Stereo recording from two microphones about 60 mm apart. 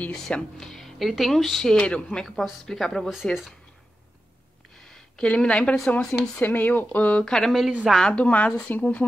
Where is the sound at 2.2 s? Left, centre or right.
Centre.